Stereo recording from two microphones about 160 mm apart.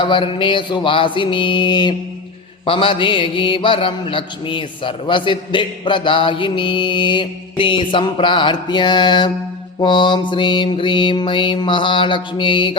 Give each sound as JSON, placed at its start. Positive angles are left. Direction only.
{"t": 0.0, "sound": "mantra", "side_deg": 30}